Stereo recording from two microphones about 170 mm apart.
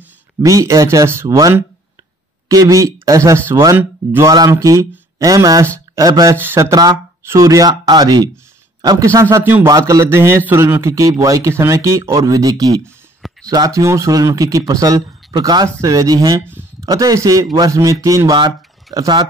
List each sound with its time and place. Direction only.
0.4 s a man's voice: 20° right (ahead or behind)